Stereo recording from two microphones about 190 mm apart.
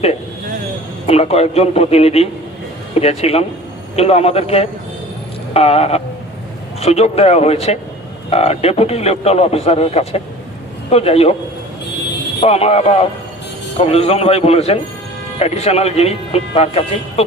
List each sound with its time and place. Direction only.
1.0 s a man's voice: 30° left (ahead or behind)
12.4 s a man's voice: 30° left (ahead or behind)